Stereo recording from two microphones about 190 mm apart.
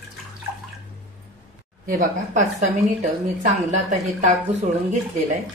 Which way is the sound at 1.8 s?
45° right (ahead or behind).